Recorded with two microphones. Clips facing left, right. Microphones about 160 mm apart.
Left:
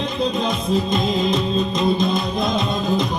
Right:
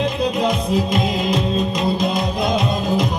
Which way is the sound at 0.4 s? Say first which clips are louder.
Right 2 dB; 25° left (ahead or behind).